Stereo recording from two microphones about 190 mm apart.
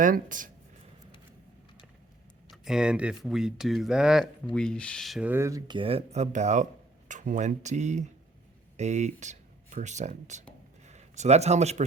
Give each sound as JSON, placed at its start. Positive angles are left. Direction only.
{"t": 0.0, "sound": "speech", "side_deg": -45}
{"t": 2.5, "sound": "speech", "side_deg": -5}